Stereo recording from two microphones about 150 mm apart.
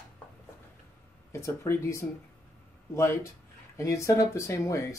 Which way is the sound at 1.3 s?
20° left (ahead or behind).